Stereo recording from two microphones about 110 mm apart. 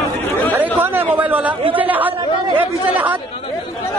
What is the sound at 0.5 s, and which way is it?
Chatter, 15° right (ahead or behind).